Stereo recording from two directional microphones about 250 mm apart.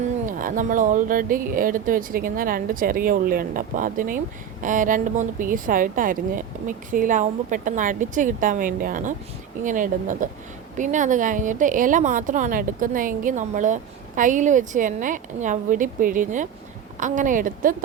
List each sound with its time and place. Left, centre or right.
0.3 s speech: right